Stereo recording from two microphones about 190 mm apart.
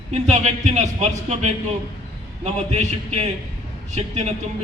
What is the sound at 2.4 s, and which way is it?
Speech, 35° right (ahead or behind).